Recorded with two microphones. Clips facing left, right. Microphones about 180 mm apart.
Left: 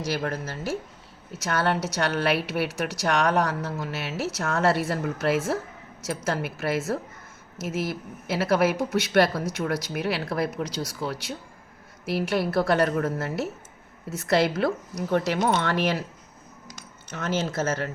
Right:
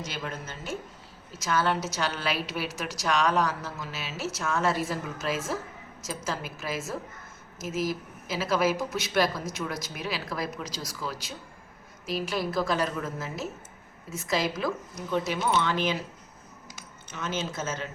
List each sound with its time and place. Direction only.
0.0 s a woman's voice: 70° left (ahead or behind)
17.1 s a woman's voice: 70° left (ahead or behind)